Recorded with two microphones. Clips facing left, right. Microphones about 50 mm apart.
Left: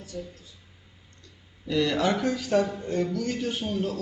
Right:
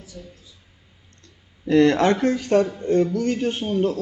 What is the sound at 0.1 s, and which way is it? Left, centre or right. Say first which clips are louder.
Speech: left 4 dB; centre.